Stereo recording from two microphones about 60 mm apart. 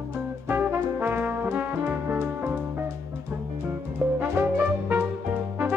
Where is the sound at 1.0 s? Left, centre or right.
Right.